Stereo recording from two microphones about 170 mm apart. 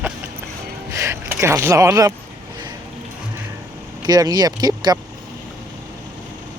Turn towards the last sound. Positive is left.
turn(degrees=-25)  # may be behind; listen again after turning